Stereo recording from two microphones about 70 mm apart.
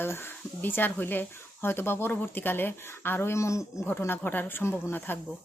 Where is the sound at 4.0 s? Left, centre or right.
Left.